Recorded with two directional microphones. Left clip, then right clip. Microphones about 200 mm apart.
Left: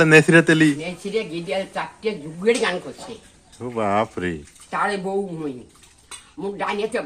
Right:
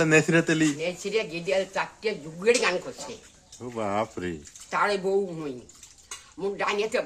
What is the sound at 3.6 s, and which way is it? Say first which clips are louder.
Speech: left 7 dB; 10° left (ahead or behind).